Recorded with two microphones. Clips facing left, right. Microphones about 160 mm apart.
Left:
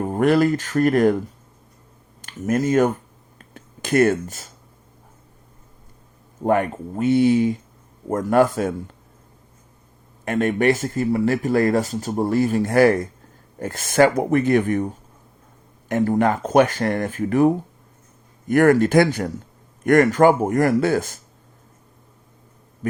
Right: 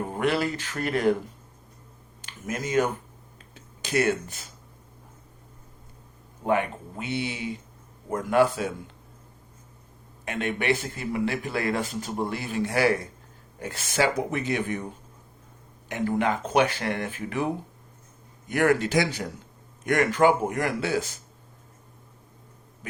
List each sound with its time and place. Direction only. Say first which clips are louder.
0.1 s speech: left 10 dB; 45° left (ahead or behind)
2.2 s speech: left 11 dB; 45° left (ahead or behind)
3.3 s a sound: left 10 dB; 50° left (ahead or behind)
6.4 s speech: left 5 dB; 45° left (ahead or behind)
10.2 s speech: left 8 dB; 45° left (ahead or behind)
22.8 s a sound: left 14 dB; 45° left (ahead or behind)